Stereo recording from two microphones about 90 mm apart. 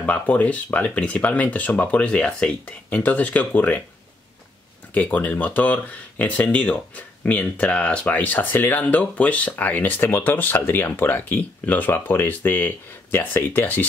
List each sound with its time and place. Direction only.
0.0 s speech: 15° left (ahead or behind)
4.9 s speech: 15° left (ahead or behind)